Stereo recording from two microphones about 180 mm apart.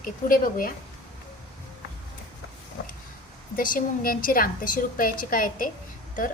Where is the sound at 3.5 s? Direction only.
50° left (ahead or behind).